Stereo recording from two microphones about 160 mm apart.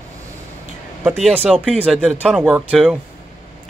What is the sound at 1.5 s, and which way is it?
Speech, 5° left (ahead or behind).